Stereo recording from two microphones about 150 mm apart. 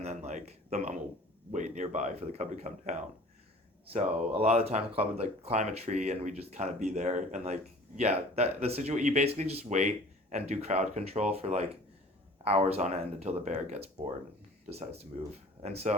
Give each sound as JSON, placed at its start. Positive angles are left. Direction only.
{"t": 0.0, "sound": "a man's voice", "side_deg": -50}
{"t": 12.7, "sound": "speech", "side_deg": -45}